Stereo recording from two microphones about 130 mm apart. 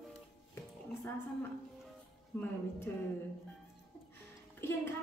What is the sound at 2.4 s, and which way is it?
Speech, 15° left (ahead or behind).